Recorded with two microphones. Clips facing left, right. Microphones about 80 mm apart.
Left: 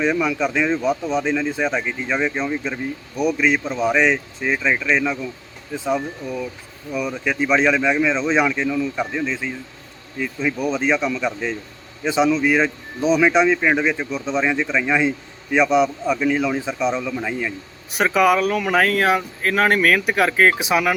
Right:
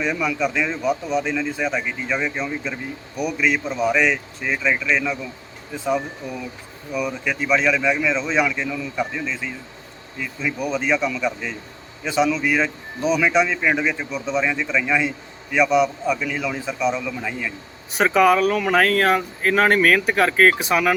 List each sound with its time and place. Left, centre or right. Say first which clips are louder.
0.0 s speech: left 3 dB; centre
6.2 s speech: left 3 dB; centre
7.3 s speech: left 3 dB; left
10.7 s speech: even; left
17.0 s speech: left 3 dB; centre
17.9 s speech: right 1 dB; centre